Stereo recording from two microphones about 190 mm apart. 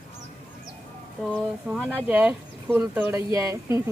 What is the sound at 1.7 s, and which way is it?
Speech, 10° right (ahead or behind).